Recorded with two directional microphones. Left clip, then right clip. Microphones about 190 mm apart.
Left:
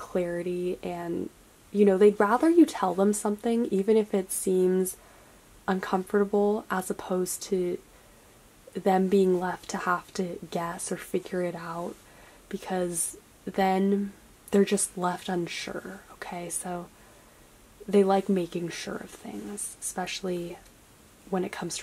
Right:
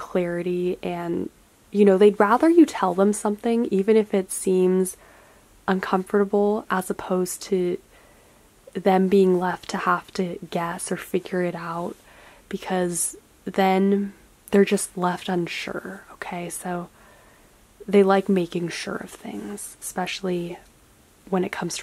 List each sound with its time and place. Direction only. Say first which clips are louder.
0.0 s a woman's voice: right 4 dB; 25° right (ahead or behind)
8.7 s a woman's voice: right 5 dB; 25° right (ahead or behind)